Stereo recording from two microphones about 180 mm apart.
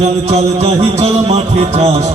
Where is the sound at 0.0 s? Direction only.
35° right (ahead or behind).